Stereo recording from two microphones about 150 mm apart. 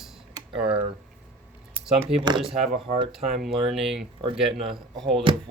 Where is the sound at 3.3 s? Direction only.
Centre (ahead or behind).